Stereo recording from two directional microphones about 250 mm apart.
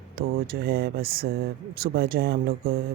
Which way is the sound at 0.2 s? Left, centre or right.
Right.